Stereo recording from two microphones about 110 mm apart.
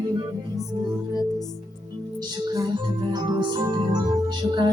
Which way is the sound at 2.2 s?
35° right (ahead or behind).